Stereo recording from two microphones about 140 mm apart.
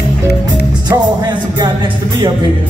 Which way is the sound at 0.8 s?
30° right (ahead or behind).